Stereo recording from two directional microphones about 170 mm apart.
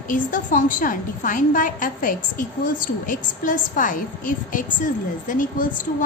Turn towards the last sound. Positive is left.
turn(degrees=50)  # may be behind; listen again after turning